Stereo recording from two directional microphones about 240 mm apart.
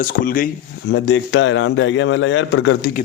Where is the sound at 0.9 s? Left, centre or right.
Left.